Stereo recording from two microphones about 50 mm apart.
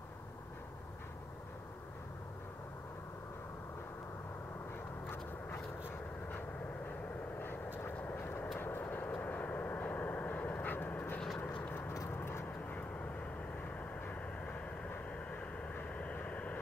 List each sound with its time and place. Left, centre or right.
7.4 s vehicle: left
8.8 s vehicle: left
12.1 s vehicle: left
15.6 s vehicle: left